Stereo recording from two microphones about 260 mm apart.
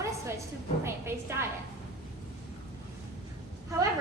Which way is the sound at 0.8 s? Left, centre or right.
Centre.